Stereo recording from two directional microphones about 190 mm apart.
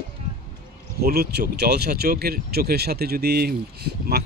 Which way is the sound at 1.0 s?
55° right (ahead or behind).